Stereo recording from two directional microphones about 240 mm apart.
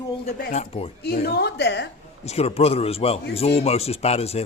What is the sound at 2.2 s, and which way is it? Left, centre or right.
Speech, left.